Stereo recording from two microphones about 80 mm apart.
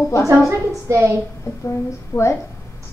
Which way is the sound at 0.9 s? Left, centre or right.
Right.